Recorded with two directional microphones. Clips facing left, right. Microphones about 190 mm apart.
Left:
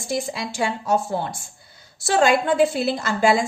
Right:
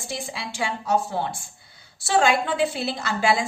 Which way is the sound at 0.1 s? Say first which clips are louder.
Left 7 dB; 40° left (ahead or behind).